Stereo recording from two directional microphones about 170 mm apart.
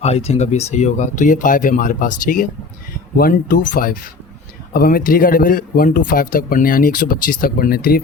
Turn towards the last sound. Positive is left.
turn(degrees=60)  # may be behind; listen again after turning